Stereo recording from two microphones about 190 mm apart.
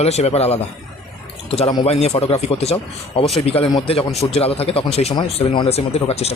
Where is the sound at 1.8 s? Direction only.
35° left (ahead or behind).